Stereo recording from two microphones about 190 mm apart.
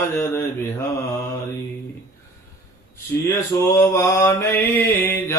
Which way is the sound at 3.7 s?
15° left (ahead or behind).